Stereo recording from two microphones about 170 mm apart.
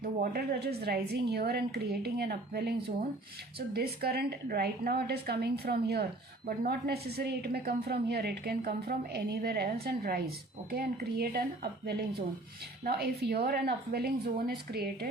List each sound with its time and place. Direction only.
0.0 s a woman's voice: 65° right (ahead or behind)